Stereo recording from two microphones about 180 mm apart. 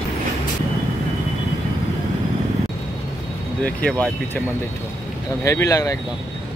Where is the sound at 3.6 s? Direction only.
5° left (ahead or behind).